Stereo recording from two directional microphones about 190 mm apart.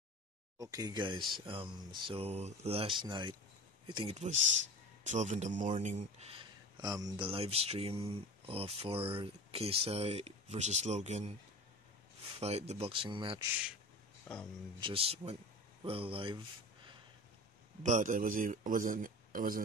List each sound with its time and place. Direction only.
0.6 s speech: 20° right (ahead or behind); by 11.3 s 35° right (ahead or behind)
12.4 s speech: 35° right (ahead or behind)
14.2 s speech: 5° left (ahead or behind)
14.8 s speech: 30° right (ahead or behind)
17.8 s a man's voice: 45° right (ahead or behind)